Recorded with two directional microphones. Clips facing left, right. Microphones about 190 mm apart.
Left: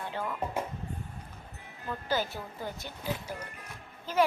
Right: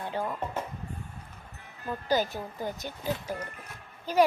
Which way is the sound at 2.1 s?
15° right (ahead or behind).